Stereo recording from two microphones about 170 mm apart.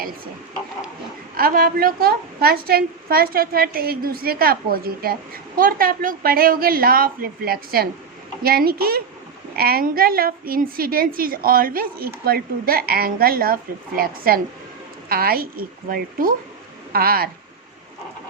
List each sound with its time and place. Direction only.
1.4 s a woman's voice: 60° right (ahead or behind)